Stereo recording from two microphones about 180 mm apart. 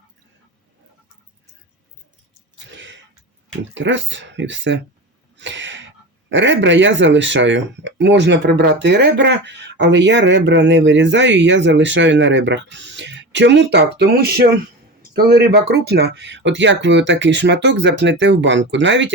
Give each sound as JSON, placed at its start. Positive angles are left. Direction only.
{"t": 2.7, "sound": "throat clearing", "side_deg": -90}
{"t": 3.8, "sound": "speech", "side_deg": -90}
{"t": 5.4, "sound": "a sound", "side_deg": -90}
{"t": 6.3, "sound": "speech", "side_deg": -90}